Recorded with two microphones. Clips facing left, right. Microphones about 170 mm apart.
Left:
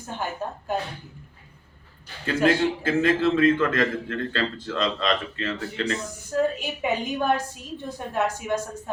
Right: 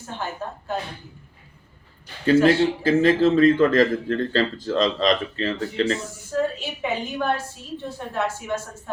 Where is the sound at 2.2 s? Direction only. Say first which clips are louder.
Right 5 dB; 35° right (ahead or behind).